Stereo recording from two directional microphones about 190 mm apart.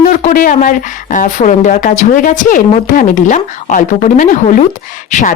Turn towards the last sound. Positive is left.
turn(degrees=40)  # may be behind; listen again after turning